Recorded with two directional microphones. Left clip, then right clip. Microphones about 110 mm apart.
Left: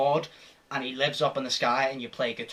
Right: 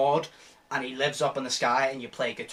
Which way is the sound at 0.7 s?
25° left (ahead or behind).